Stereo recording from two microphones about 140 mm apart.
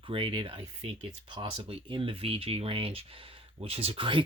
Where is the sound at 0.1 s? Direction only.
40° right (ahead or behind).